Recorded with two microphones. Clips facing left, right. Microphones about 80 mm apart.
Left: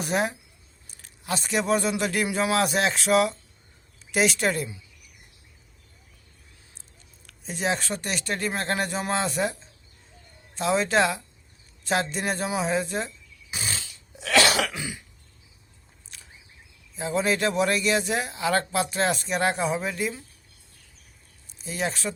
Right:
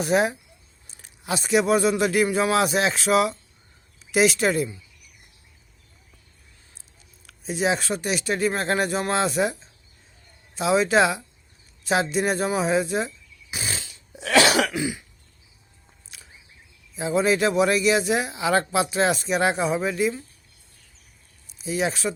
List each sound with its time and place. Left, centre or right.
0.0 s speech: centre
0.9 s speech: centre
7.3 s speech: centre
13.5 s a sound: centre
13.7 s throat clearing: right
16.1 s a sound: centre
16.9 s speech: centre
21.4 s speech: centre